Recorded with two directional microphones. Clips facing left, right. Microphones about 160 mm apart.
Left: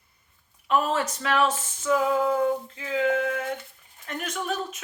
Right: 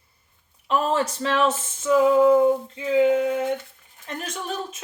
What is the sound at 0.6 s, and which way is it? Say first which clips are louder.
Speech: right 2 dB; 30° right (ahead or behind).